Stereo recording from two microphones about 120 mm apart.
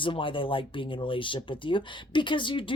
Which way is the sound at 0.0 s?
45° left (ahead or behind).